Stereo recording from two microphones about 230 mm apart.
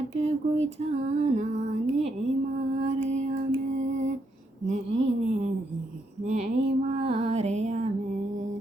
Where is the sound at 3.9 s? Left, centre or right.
Right.